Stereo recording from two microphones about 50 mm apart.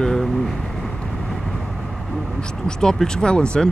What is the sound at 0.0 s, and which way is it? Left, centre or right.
Vehicle, centre.